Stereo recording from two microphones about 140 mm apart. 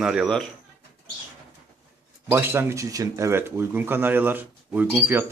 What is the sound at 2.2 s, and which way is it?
Speech, 15° right (ahead or behind).